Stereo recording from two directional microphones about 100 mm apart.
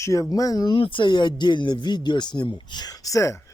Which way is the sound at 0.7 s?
60° left (ahead or behind).